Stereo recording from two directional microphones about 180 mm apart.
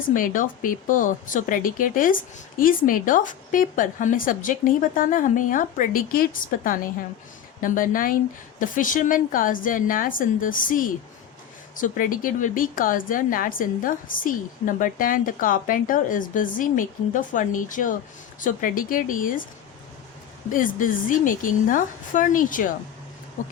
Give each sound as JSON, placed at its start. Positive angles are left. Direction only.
{"t": 0.1, "sound": "speech", "side_deg": 50}
{"t": 7.6, "sound": "speech", "side_deg": 50}
{"t": 20.5, "sound": "speech", "side_deg": 50}